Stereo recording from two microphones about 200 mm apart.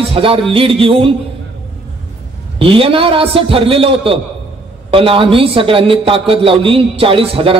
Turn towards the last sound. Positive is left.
turn(degrees=-25)  # may be behind; listen again after turning